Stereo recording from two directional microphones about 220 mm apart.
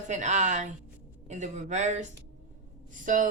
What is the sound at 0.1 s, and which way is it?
A woman's voice, 35° right (ahead or behind).